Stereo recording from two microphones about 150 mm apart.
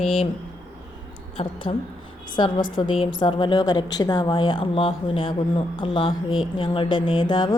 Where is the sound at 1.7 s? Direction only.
35° left (ahead or behind).